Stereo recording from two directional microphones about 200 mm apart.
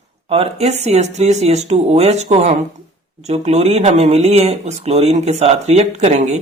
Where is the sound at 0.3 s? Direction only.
30° right (ahead or behind).